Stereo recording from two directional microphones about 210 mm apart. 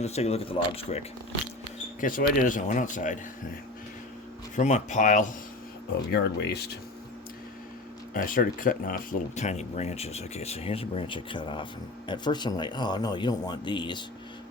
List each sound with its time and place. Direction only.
0.0 s speech: 30° left (ahead or behind)
2.0 s speech: 40° left (ahead or behind)
4.5 s speech: 35° left (ahead or behind)
6.1 s speech: 50° left (ahead or behind)
8.1 s speech: 40° left (ahead or behind); by 14.0 s 20° left (ahead or behind)